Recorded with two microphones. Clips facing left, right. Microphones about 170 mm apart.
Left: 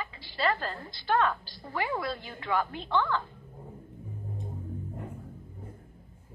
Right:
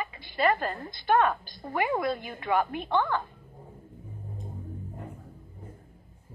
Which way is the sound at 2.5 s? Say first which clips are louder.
Right 3 dB; 45° right (ahead or behind).